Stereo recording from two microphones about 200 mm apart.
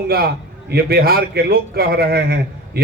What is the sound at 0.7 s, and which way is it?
A man's voice, 50° right (ahead or behind).